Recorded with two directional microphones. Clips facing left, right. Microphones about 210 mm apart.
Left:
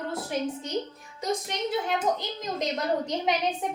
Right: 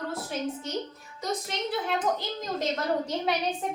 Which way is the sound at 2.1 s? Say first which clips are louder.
Even; 15° left (ahead or behind).